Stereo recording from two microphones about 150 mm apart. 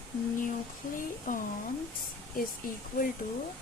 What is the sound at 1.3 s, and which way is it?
Speech, 60° left (ahead or behind).